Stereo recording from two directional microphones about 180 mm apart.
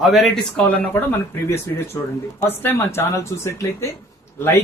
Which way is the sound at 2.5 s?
10° left (ahead or behind).